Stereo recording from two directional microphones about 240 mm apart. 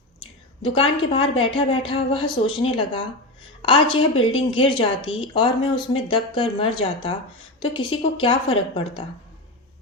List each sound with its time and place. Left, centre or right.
0.2 s speech: left
4.2 s speech: left